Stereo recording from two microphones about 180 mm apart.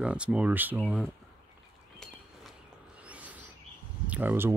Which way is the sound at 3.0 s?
10° right (ahead or behind).